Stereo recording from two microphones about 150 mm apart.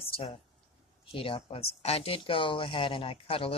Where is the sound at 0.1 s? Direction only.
40° left (ahead or behind).